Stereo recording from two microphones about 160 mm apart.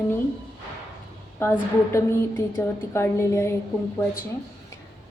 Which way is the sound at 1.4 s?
15° left (ahead or behind).